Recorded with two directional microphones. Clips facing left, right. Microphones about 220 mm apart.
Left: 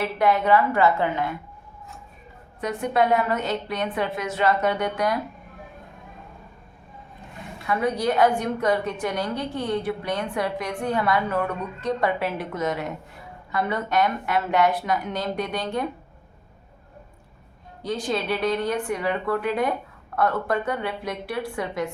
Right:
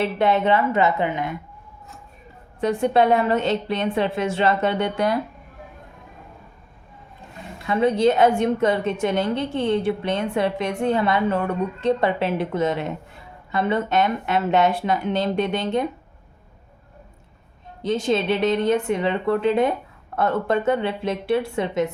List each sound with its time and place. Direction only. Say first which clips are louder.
0.0 s a woman's voice: right 2 dB; 25° right (ahead or behind)
2.6 s a woman's voice: right 4 dB; 30° right (ahead or behind)
7.7 s a woman's voice: right 5 dB; 25° right (ahead or behind)
17.8 s a woman's voice: right 5 dB; 25° right (ahead or behind)